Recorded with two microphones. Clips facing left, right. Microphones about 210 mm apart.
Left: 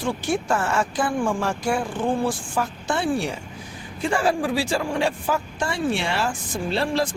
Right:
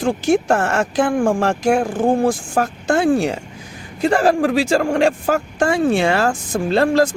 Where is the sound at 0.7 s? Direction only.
70° right (ahead or behind).